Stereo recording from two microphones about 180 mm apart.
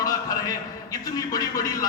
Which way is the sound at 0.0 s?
20° left (ahead or behind).